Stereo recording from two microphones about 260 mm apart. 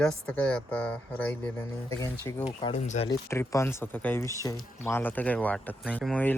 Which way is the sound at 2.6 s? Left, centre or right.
Left.